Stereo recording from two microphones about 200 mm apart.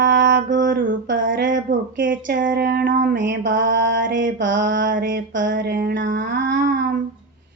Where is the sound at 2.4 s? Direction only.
55° right (ahead or behind).